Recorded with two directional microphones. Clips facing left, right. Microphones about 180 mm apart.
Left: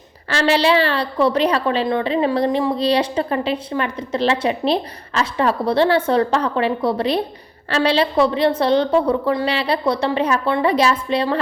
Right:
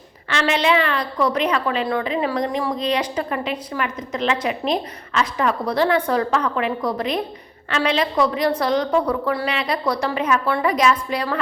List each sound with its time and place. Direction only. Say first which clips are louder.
0.3 s a woman's voice: left 3 dB; 35° left (ahead or behind)